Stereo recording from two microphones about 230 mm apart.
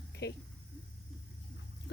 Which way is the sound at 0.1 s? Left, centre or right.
Left.